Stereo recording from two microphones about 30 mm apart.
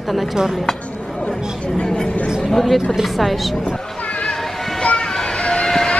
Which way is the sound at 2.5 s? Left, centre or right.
Centre.